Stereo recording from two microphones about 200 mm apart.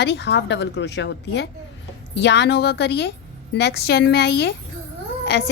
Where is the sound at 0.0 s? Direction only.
60° left (ahead or behind).